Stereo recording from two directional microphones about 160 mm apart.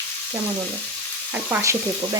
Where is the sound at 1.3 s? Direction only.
15° right (ahead or behind).